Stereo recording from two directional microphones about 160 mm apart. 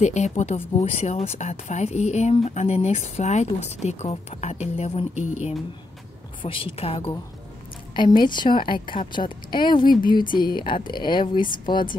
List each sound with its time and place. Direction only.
0.0 s speech: 45° left (ahead or behind)
6.4 s speech: 35° left (ahead or behind)
8.2 s speech: 30° left (ahead or behind)